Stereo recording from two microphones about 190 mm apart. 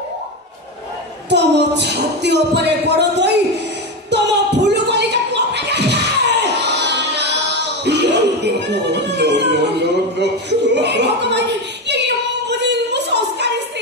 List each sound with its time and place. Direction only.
1.3 s music: 65° right (ahead or behind)